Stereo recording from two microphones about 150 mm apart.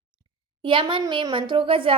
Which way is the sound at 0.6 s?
35° right (ahead or behind).